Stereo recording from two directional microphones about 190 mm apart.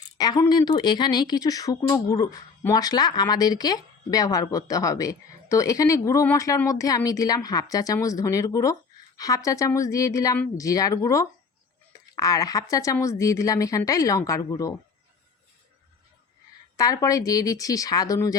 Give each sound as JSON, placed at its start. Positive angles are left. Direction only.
{"t": 0.2, "sound": "a woman's voice", "side_deg": 20}
{"t": 16.7, "sound": "a woman's voice", "side_deg": 20}